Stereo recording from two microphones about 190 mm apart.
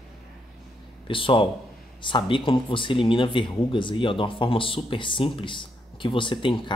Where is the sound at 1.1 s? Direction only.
25° left (ahead or behind).